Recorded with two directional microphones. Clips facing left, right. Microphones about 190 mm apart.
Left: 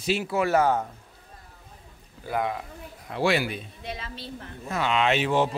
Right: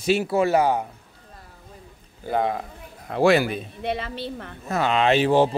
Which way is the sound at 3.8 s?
65° right (ahead or behind).